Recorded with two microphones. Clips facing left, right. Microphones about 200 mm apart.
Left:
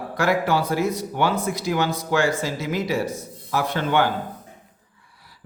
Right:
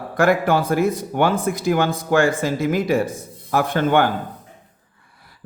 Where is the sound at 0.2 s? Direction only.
50° right (ahead or behind).